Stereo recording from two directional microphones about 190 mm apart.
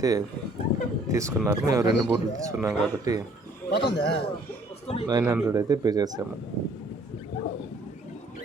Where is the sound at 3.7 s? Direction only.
60° left (ahead or behind).